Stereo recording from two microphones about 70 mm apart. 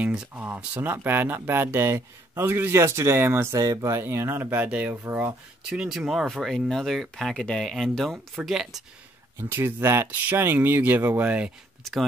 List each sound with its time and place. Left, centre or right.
0.0 s speech: centre
0.8 s speech: right
3.5 s speech: right
4.0 s speech: right
4.6 s speech: centre
5.7 s speech: centre
9.4 s speech: right